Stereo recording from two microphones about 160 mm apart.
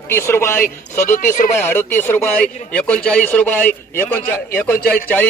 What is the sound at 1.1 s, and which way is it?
Speech, 55° left (ahead or behind).